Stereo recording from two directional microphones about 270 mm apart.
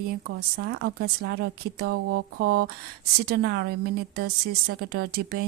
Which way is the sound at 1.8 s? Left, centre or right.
Right.